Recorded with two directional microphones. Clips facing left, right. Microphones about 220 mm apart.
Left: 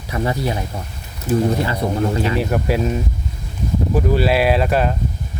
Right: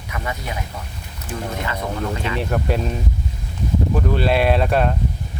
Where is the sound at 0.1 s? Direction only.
35° left (ahead or behind).